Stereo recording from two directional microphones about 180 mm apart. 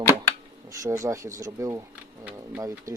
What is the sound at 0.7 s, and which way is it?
Speech, 15° right (ahead or behind).